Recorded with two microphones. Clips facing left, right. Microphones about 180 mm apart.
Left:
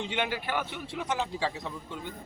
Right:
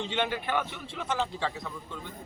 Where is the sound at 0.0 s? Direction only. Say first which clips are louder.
Right 1 dB; 10° left (ahead or behind).